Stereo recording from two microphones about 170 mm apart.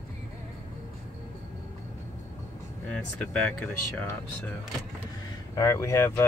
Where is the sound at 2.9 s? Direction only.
5° left (ahead or behind).